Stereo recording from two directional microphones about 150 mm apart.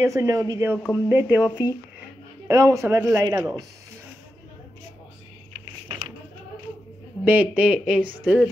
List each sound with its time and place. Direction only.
0.0 s speech: 20° right (ahead or behind)
2.4 s speech: 20° right (ahead or behind)
7.2 s speech: 10° right (ahead or behind)